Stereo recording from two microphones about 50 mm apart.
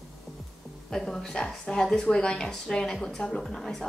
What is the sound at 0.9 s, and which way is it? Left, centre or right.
A woman's voice, centre.